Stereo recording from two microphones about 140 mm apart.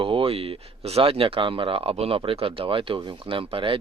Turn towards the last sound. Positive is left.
turn(degrees=-40)  # may be behind; listen again after turning